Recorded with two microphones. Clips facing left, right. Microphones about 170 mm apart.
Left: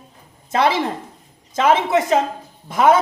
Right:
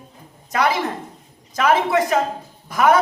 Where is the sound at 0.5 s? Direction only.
25° left (ahead or behind).